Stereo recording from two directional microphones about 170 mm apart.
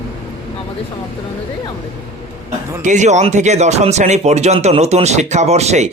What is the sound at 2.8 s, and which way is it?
Speech, 45° right (ahead or behind).